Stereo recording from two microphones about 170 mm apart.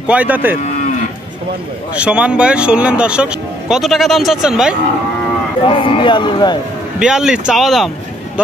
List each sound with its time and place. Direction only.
0.1 s speech: 10° right (ahead or behind)
2.0 s speech: 5° right (ahead or behind)
5.7 s speech: 30° left (ahead or behind)
7.0 s speech: 5° right (ahead or behind)